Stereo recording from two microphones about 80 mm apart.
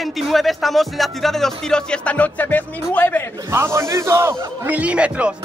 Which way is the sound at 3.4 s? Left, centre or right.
Right.